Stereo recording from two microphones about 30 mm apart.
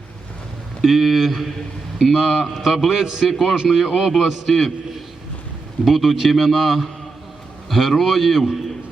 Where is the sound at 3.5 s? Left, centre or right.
Centre.